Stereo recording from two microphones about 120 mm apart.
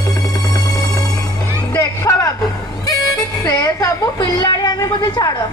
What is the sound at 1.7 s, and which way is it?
Music, 25° left (ahead or behind).